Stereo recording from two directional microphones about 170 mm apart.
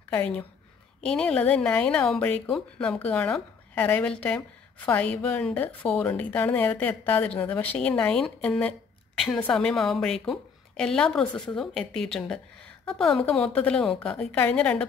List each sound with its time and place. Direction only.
0.1 s a woman's voice: 10° left (ahead or behind)